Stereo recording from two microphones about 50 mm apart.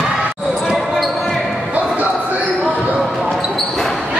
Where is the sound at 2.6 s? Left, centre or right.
Right.